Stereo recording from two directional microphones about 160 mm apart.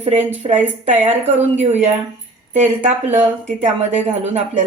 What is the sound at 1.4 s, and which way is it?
Speech, 45° right (ahead or behind).